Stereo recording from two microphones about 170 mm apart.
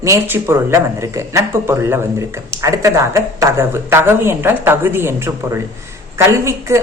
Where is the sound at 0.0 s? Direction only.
15° right (ahead or behind).